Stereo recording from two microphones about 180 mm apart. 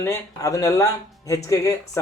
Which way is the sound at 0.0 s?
15° left (ahead or behind).